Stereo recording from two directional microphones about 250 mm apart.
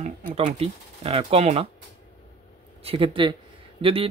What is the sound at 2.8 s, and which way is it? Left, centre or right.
Speech, right.